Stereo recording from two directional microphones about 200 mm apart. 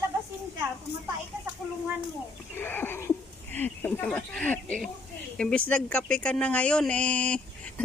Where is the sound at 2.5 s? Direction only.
10° left (ahead or behind).